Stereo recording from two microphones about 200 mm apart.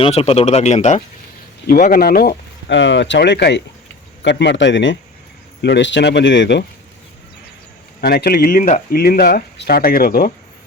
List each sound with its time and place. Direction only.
0.0 s speech: 30° left (ahead or behind)
1.6 s speech: 45° left (ahead or behind)
8.0 s speech: 50° left (ahead or behind)